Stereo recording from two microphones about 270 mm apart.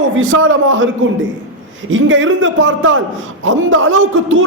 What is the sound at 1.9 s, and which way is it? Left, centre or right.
A man's voice, right.